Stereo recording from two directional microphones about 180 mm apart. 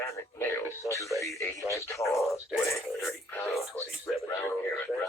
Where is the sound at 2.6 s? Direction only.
15° left (ahead or behind).